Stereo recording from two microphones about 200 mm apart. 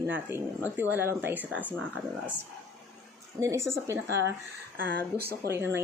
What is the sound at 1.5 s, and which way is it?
Speech, 10° left (ahead or behind).